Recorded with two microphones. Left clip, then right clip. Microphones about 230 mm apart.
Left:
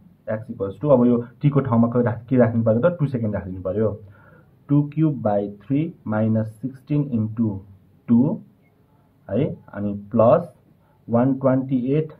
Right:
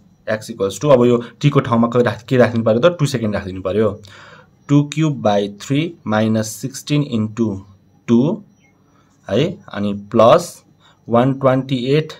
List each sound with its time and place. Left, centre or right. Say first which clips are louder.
0.2 s speech: right 7 dB; right
8.0 s a sound: right 4 dB; right
9.2 s speech: right 6 dB; right